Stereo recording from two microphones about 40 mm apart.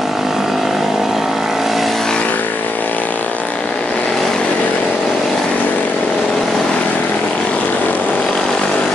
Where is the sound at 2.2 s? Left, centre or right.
Left.